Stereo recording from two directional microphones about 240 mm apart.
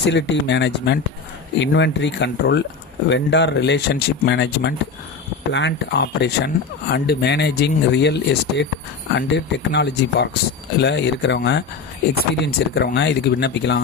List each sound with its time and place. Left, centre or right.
0.0 s speech: left